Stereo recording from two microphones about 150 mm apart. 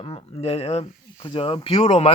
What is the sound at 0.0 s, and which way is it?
Speech, 40° left (ahead or behind).